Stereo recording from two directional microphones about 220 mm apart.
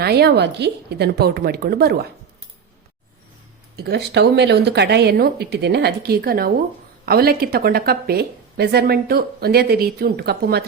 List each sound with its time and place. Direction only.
0.0 s speech: 45° right (ahead or behind)
3.8 s speech: 45° right (ahead or behind)